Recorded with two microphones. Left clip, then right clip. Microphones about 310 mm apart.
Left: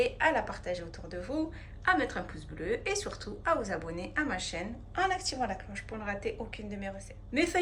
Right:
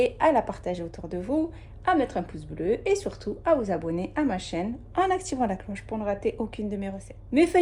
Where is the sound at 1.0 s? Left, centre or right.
Right.